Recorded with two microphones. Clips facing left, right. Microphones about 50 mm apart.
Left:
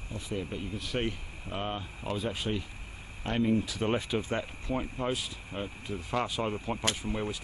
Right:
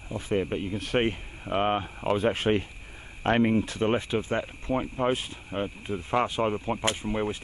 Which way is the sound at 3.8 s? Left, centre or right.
Right.